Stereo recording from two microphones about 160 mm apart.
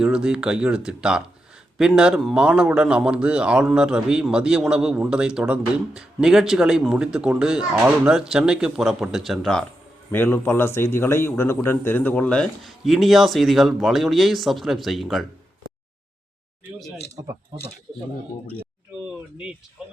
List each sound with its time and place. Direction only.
0.0 s speech: 5° right (ahead or behind)
17.9 s speech: 30° right (ahead or behind)